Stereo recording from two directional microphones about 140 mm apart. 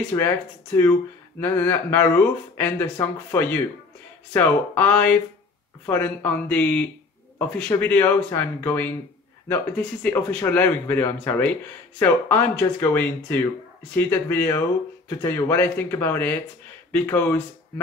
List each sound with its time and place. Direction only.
0.1 s a man's voice: 15° left (ahead or behind)